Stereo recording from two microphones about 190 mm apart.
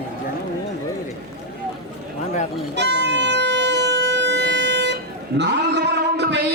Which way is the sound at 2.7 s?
65° right (ahead or behind).